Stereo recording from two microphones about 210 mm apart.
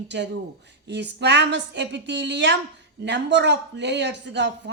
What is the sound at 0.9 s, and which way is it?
Speech, 55° right (ahead or behind).